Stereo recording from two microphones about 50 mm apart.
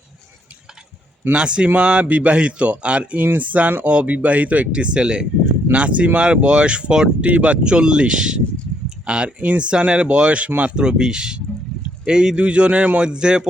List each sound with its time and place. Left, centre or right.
1.3 s speech: centre
13.0 s speech: centre